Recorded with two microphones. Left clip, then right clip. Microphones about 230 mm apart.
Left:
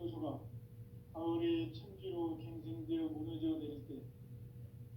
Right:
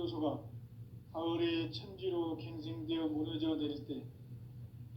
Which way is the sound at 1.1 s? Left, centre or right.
Right.